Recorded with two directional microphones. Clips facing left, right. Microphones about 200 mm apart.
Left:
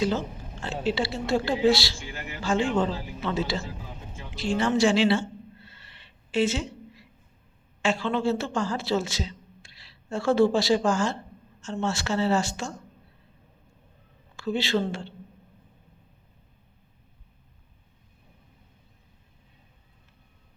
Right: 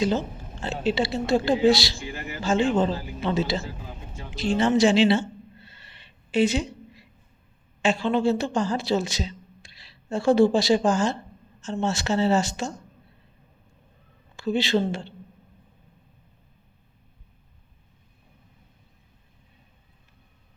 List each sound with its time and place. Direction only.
0.6 s speech: 20° right (ahead or behind)
4.4 s a sound: 20° right (ahead or behind)
7.8 s a woman's voice: 15° right (ahead or behind)
14.3 s speech: 20° right (ahead or behind)